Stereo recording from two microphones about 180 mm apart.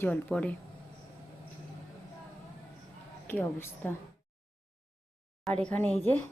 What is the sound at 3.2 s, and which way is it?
Speech, 10° left (ahead or behind).